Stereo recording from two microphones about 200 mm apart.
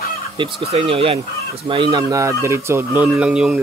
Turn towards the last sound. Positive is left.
turn(degrees=-5)  # may be behind; listen again after turning